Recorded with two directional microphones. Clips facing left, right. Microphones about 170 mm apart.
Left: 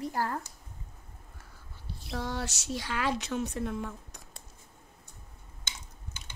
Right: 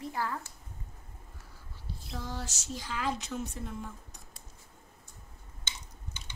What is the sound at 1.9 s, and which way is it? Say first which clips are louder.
A woman's voice: left 5 dB; 70° left (ahead or behind).